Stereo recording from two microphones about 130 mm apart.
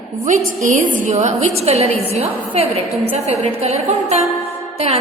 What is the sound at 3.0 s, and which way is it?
Speech, 50° right (ahead or behind).